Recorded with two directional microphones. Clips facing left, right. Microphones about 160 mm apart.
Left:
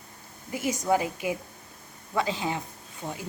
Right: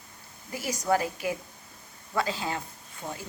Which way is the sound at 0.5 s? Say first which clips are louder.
Left 2 dB; 20° left (ahead or behind).